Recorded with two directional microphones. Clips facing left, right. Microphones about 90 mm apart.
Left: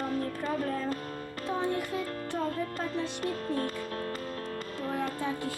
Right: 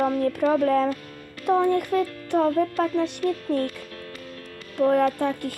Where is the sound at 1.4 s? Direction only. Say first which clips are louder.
Right 11 dB; 60° right (ahead or behind).